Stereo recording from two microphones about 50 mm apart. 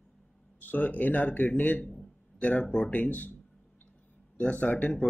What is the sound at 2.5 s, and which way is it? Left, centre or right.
Speech, centre.